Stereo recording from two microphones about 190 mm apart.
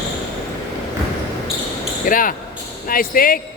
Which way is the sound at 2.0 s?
45° left (ahead or behind).